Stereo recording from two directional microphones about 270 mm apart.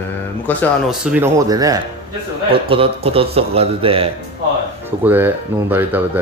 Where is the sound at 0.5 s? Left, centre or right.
Centre; by 4.1 s right.